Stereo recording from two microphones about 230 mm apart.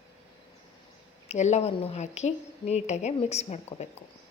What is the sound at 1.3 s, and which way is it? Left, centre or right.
A woman's voice, left.